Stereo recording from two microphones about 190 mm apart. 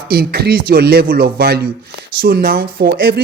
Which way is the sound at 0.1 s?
55° right (ahead or behind).